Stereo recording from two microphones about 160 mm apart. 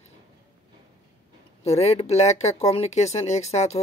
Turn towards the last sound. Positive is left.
turn(degrees=45)  # may be behind; listen again after turning